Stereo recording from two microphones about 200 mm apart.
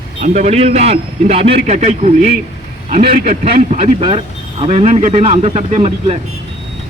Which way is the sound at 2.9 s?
50° right (ahead or behind).